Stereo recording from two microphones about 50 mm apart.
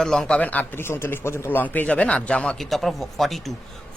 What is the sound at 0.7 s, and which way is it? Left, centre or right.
Speech, left.